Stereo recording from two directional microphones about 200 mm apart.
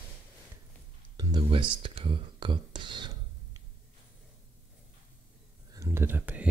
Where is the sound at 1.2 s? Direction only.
25° right (ahead or behind).